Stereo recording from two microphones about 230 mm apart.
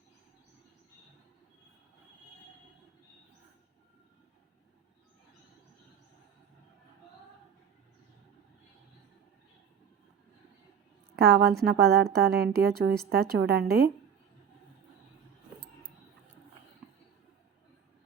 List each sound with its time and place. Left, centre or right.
11.2 s a woman's voice: right